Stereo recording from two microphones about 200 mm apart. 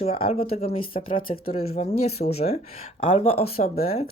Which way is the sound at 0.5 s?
30° left (ahead or behind).